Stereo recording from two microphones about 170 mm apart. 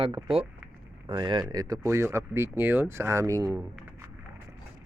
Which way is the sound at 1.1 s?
25° right (ahead or behind).